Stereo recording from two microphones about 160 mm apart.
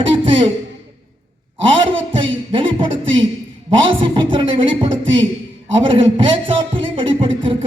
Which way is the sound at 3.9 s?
30° right (ahead or behind).